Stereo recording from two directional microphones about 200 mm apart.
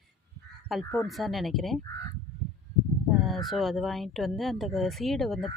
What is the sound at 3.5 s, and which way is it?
Speech, centre (ahead or behind).